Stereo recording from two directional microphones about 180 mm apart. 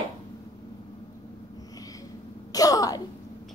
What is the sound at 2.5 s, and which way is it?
Speech, 20° left (ahead or behind).